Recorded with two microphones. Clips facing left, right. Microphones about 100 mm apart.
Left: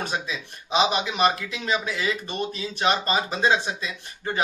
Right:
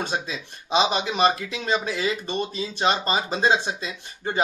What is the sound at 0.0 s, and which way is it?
Speech, 30° right (ahead or behind).